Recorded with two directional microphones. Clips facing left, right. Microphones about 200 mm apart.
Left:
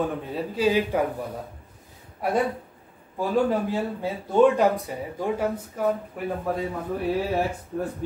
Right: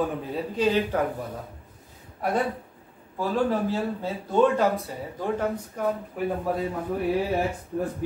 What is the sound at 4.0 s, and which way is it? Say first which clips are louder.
A man's voice: left 4 dB; 15° left (ahead or behind).